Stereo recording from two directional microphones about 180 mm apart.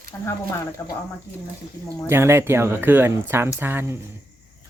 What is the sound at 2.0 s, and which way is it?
Speech, 15° right (ahead or behind).